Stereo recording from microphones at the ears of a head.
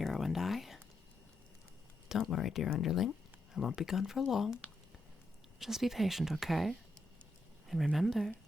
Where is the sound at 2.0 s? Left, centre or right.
Left.